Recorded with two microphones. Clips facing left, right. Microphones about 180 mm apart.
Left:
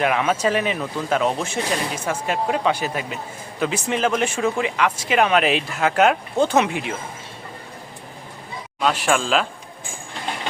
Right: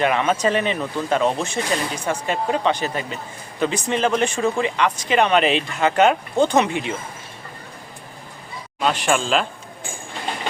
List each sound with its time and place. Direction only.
0.0 s speech: 5° left (ahead or behind)
8.8 s speech: centre (ahead or behind)